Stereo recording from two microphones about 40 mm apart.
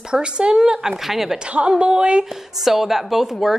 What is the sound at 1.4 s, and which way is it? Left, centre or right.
Speech, right.